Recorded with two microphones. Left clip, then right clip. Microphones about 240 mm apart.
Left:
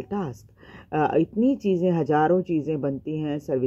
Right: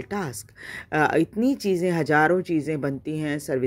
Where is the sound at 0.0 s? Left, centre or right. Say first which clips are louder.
Right 1 dB; right.